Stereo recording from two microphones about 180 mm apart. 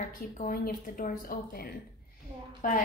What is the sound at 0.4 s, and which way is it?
Speech, 50° left (ahead or behind).